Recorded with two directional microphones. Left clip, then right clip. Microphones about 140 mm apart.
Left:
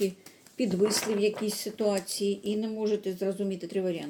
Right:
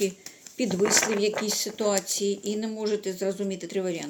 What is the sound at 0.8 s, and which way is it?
Speech, 45° right (ahead or behind).